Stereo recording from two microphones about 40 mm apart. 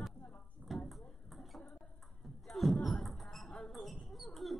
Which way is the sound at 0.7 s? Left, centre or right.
Centre.